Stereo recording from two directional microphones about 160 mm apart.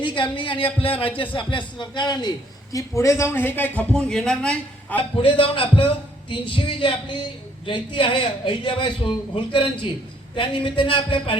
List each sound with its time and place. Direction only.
0.0 s a man's voice: 30° left (ahead or behind); by 4.9 s 5° left (ahead or behind)
5.1 s speech: 35° left (ahead or behind)